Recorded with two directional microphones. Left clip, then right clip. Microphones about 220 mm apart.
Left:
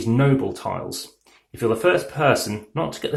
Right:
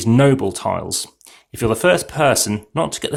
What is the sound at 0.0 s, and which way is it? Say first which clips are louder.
Speech: right 6 dB; 45° right (ahead or behind).